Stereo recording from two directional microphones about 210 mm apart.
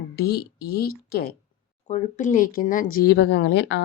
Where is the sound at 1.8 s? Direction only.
35° left (ahead or behind); by 3.8 s 55° left (ahead or behind).